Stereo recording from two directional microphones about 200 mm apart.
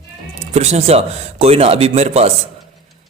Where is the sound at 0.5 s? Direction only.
35° right (ahead or behind).